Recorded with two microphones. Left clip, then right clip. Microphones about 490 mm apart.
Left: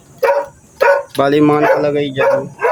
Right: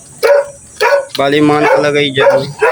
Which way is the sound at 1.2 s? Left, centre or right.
Left.